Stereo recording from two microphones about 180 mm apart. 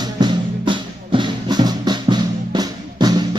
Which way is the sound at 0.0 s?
25° right (ahead or behind).